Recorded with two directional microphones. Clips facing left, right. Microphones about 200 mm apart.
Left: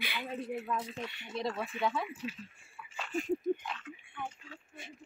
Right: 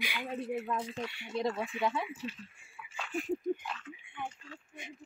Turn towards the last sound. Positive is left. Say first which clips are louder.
# left 1 dB
turn(degrees=0)  # may be behind; listen again after turning